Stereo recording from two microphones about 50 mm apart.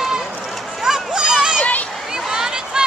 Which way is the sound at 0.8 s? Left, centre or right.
Centre.